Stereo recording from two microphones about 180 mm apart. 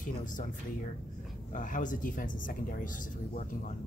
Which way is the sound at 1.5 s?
45° left (ahead or behind).